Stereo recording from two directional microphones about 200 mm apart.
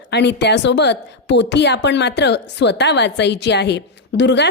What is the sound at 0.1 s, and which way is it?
A woman's voice, 55° left (ahead or behind).